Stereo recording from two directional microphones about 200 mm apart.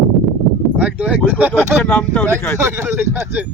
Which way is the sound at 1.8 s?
10° left (ahead or behind).